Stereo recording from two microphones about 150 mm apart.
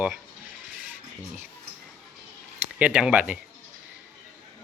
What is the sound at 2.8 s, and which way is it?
Speech, 10° right (ahead or behind).